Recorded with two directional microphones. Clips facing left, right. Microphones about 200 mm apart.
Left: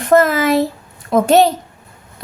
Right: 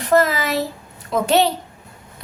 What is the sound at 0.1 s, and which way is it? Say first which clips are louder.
A woman's voice: left 5 dB; 50° left (ahead or behind).